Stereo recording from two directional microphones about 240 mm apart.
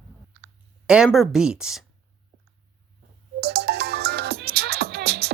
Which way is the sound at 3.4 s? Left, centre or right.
Right.